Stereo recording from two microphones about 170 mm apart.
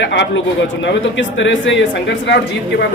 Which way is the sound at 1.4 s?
90° left.